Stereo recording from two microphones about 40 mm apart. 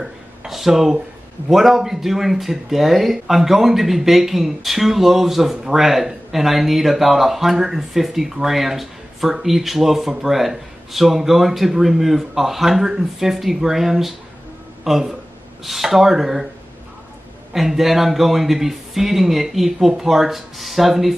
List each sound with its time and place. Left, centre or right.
0.5 s speech: centre
17.5 s speech: centre